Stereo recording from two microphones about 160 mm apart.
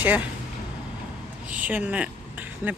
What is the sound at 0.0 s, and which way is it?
Speech, 10° right (ahead or behind).